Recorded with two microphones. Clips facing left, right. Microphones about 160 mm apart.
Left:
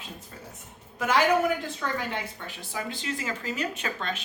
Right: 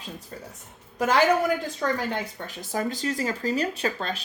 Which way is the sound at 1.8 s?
40° right (ahead or behind).